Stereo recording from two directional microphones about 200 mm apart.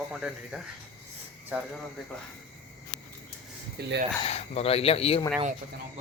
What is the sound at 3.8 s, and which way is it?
Speech, 55° right (ahead or behind).